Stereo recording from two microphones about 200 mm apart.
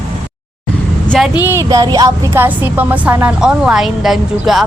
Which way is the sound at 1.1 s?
Centre (ahead or behind).